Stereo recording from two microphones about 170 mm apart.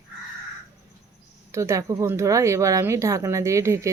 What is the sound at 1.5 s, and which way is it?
Speech, 20° right (ahead or behind).